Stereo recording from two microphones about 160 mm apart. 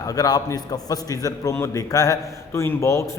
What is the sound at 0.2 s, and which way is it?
A man's voice, 25° left (ahead or behind).